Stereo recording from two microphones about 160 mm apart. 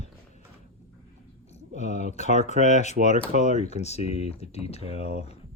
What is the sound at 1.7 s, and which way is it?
Speech, 45° left (ahead or behind).